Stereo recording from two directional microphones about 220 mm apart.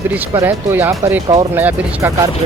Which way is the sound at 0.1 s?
10° right (ahead or behind).